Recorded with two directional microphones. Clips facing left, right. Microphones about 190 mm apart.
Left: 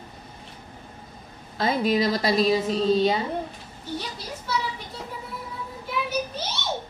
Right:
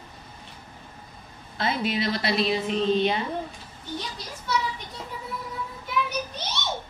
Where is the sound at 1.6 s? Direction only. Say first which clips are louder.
Left 4 dB; 40° left (ahead or behind).